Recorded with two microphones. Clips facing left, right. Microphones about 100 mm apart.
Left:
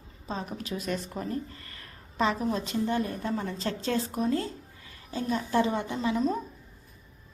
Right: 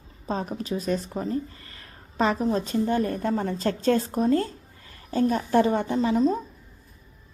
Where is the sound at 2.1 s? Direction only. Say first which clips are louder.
Right 4 dB; 40° right (ahead or behind).